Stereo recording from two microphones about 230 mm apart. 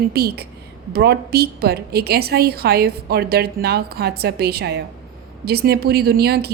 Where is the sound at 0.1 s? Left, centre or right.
Right.